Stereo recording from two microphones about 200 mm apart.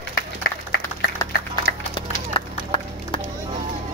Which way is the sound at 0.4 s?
50° left (ahead or behind).